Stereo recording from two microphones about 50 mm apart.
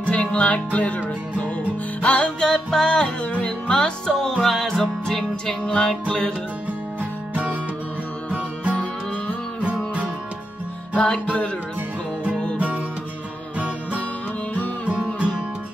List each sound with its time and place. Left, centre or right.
0.0 s music: left
2.4 s music: centre
3.3 s music: left
3.6 s music: centre
4.4 s music: centre
5.5 s music: centre
7.0 s music: right
11.0 s music: left
12.5 s music: right